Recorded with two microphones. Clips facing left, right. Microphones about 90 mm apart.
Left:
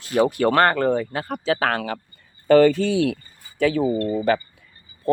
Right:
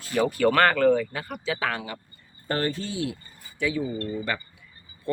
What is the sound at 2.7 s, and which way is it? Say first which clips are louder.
Speech: left 10 dB; 90° left.